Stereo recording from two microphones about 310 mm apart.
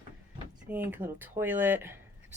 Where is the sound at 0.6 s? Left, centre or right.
Centre.